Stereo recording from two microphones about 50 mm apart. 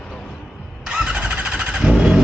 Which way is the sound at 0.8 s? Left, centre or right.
Centre.